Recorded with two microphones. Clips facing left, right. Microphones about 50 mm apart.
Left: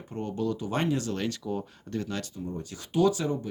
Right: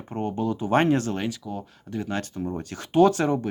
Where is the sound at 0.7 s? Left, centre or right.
Right.